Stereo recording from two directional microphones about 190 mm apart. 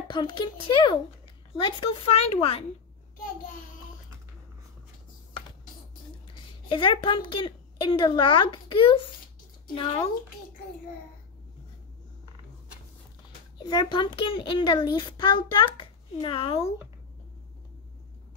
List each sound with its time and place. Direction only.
0.1 s a child's voice: 25° left (ahead or behind)
6.7 s a child's voice: 25° left (ahead or behind)
13.6 s a child's voice: 20° left (ahead or behind)